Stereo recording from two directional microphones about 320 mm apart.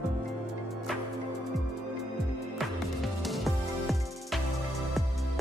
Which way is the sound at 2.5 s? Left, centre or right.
Centre.